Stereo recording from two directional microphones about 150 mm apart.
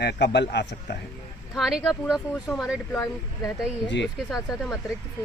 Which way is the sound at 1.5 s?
5° right (ahead or behind).